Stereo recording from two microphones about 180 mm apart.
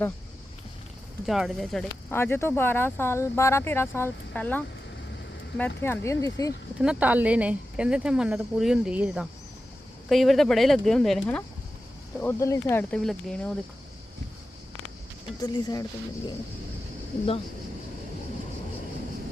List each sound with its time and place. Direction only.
1.3 s speech: centre (ahead or behind)
2.0 s speech: 10° left (ahead or behind)
6.7 s speech: 5° right (ahead or behind)
12.2 s speech: 15° left (ahead or behind)
15.4 s speech: 25° left (ahead or behind)